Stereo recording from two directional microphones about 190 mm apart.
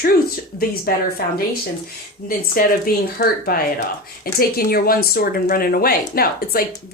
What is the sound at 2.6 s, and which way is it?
Speech, 50° left (ahead or behind).